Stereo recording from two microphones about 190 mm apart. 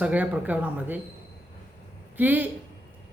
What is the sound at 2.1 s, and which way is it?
Speech, 10° right (ahead or behind).